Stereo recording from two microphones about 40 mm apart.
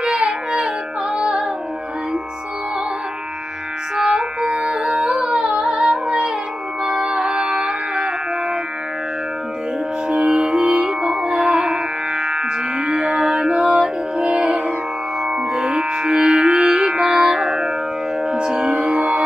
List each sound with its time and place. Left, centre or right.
0.2 s music: centre
3.9 s music: centre
10.3 s music: right